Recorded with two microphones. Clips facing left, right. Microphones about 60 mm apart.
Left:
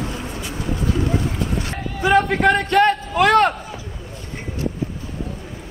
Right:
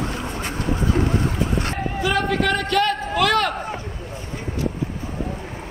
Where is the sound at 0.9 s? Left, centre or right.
Right.